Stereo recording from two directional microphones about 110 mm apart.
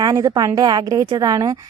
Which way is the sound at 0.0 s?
35° right (ahead or behind).